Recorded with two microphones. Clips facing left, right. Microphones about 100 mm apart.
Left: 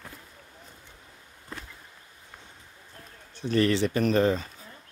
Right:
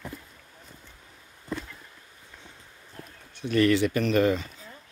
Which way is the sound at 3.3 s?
35° left (ahead or behind).